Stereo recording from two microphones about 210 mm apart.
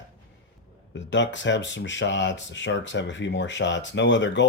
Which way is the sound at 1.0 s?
60° left (ahead or behind).